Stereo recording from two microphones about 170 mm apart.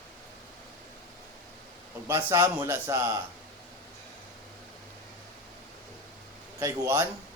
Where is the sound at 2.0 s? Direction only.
15° right (ahead or behind).